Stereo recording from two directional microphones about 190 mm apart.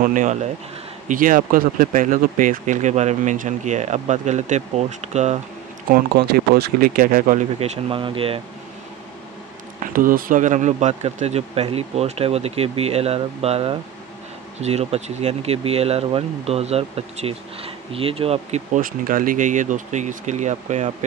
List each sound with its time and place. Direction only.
0.0 s speech: 45° right (ahead or behind)
6.1 s speech: 60° right (ahead or behind); by 8.4 s 30° right (ahead or behind)
9.8 s speech: 45° right (ahead or behind)
18.8 s speech: 45° right (ahead or behind)